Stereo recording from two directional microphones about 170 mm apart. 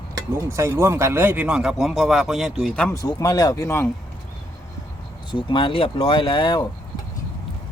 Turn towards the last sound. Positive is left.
turn(degrees=25)  # may be behind; listen again after turning